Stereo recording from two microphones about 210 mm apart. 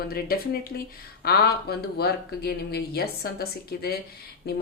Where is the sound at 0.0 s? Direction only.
45° left (ahead or behind).